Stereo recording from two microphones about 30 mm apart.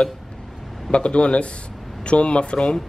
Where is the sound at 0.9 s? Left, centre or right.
Left.